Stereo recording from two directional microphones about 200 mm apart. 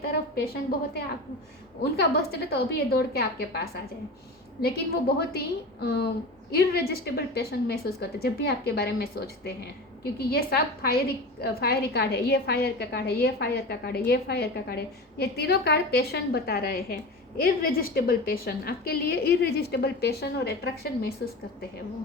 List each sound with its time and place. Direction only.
0.1 s a woman's voice: 50° left (ahead or behind)